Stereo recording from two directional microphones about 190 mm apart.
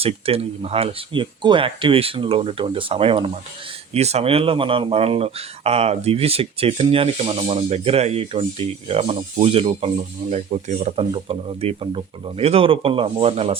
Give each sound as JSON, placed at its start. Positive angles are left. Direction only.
{"t": 0.0, "sound": "speech", "side_deg": -30}